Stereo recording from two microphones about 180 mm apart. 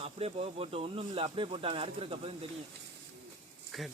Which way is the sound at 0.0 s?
35° right (ahead or behind).